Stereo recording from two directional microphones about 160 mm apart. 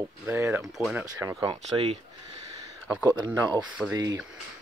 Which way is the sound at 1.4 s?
35° right (ahead or behind).